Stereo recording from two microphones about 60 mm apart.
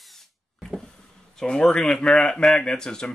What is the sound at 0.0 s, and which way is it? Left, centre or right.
Tools, centre.